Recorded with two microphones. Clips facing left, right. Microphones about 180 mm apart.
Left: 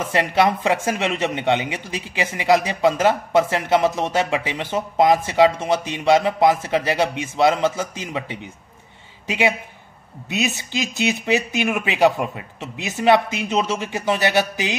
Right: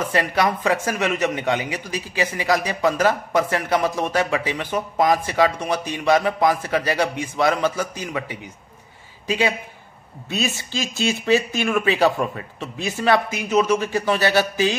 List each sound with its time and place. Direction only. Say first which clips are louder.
0.0 s speech: left 2 dB; 25° left (ahead or behind)
10.3 s speech: left 1 dB; 20° left (ahead or behind)